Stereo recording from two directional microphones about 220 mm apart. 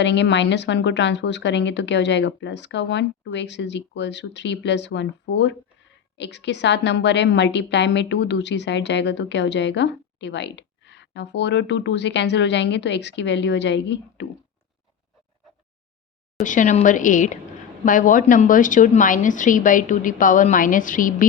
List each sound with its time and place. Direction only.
0.0 s a woman's voice: 55° left (ahead or behind)
16.4 s a woman's voice: 35° left (ahead or behind)